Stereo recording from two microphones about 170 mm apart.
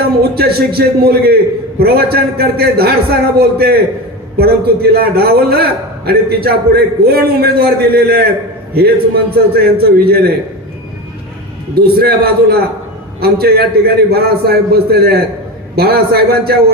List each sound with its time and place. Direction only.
0.3 s a man's voice: 65° right (ahead or behind)
9.3 s a man's voice: 65° right (ahead or behind)
11.7 s a man's voice: 65° right (ahead or behind)